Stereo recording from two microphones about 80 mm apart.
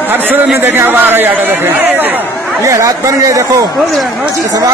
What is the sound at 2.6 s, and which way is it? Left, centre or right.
Speech, right.